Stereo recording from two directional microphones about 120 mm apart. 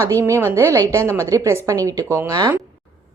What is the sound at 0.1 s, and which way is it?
A woman's voice, 25° right (ahead or behind).